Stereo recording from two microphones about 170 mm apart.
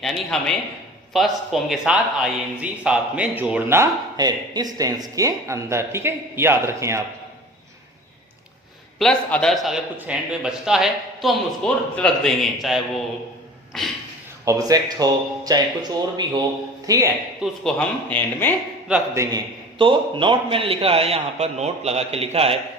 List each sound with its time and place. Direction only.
0.0 s a man's voice: centre (ahead or behind); by 7.0 s 15° right (ahead or behind)
9.0 s a man's voice: 5° left (ahead or behind)
14.4 s a man's voice: 20° right (ahead or behind)
17.4 s a man's voice: centre (ahead or behind)
18.9 s speech: 10° right (ahead or behind)
19.8 s a man's voice: 30° right (ahead or behind)